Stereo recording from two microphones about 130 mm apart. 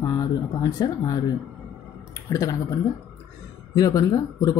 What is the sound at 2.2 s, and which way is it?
Speech, 25° left (ahead or behind).